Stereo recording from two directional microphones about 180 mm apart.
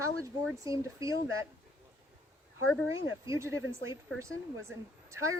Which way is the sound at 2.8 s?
15° right (ahead or behind).